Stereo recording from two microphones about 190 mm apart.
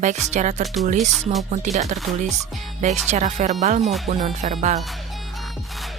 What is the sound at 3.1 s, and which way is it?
Speech, 40° right (ahead or behind).